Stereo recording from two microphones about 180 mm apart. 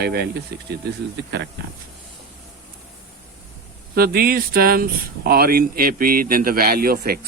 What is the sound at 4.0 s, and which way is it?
Speech, 55° right (ahead or behind).